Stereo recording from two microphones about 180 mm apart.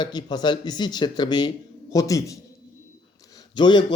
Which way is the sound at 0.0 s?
25° left (ahead or behind).